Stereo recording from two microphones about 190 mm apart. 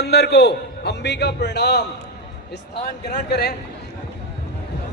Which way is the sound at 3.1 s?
60° left (ahead or behind).